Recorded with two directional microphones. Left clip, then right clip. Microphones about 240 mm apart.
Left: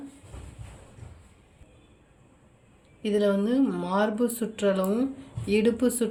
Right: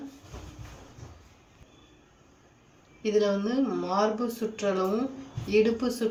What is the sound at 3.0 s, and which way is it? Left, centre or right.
Speech, left.